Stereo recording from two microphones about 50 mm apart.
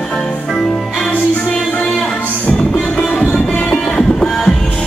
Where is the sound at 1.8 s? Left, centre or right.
Centre.